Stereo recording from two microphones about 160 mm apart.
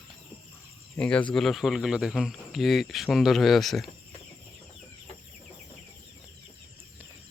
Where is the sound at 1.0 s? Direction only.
5° left (ahead or behind).